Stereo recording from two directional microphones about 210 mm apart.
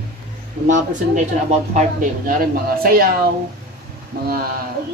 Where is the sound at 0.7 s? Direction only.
35° right (ahead or behind).